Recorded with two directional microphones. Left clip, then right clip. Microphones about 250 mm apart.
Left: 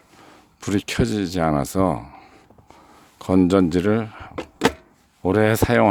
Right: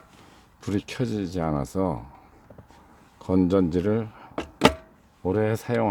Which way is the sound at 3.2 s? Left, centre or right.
Left.